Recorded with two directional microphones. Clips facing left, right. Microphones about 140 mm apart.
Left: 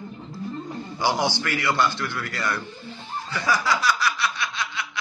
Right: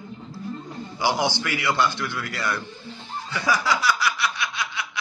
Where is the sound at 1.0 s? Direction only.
15° right (ahead or behind).